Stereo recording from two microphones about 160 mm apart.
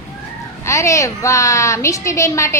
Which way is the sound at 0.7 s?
20° left (ahead or behind).